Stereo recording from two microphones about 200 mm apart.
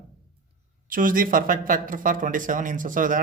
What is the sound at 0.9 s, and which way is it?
Speech, 45° right (ahead or behind).